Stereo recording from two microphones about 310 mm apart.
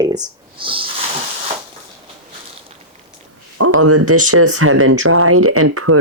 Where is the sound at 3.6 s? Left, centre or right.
Right.